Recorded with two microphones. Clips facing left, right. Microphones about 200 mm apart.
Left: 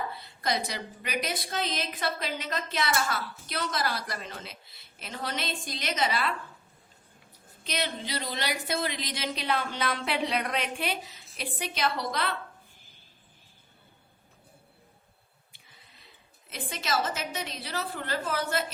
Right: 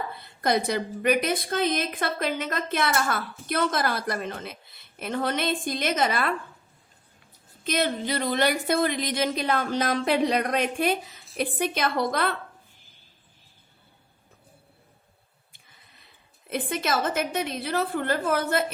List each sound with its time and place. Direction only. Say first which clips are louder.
0.1 s a woman's voice: right 6 dB; 55° right (ahead or behind)
7.6 s a woman's voice: right 7 dB; 50° right (ahead or behind)
16.5 s a woman's voice: right 6 dB; 55° right (ahead or behind)